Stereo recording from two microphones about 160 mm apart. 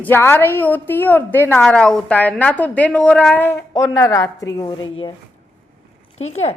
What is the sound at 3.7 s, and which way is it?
A woman's voice, 20° left (ahead or behind).